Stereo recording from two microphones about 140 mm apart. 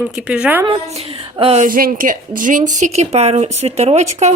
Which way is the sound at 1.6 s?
90° right.